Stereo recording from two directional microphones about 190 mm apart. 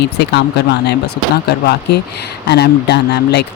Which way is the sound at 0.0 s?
60° left (ahead or behind).